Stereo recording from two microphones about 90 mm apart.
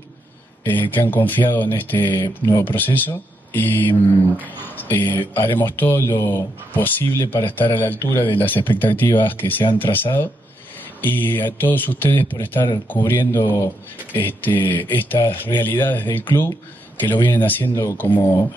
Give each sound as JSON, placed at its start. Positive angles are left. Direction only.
{"t": 0.7, "sound": "speech", "side_deg": 20}
{"t": 2.2, "sound": "speech", "side_deg": 35}
{"t": 2.6, "sound": "speech", "side_deg": 20}